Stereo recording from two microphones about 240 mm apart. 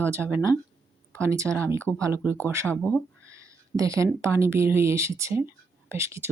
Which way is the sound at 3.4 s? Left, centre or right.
Centre.